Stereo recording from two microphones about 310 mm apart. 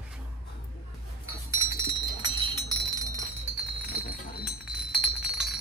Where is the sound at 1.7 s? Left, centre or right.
Centre.